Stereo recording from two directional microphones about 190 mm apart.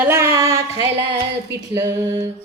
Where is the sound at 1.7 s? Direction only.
10° right (ahead or behind).